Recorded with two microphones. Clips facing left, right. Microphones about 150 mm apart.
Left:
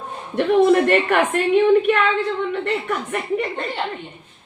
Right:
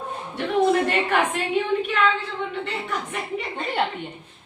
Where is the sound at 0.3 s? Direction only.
60° left (ahead or behind).